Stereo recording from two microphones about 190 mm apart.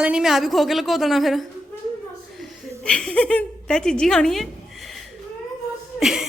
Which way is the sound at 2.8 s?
5° left (ahead or behind).